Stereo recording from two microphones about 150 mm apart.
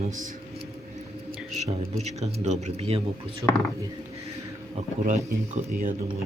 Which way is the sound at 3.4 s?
20° right (ahead or behind).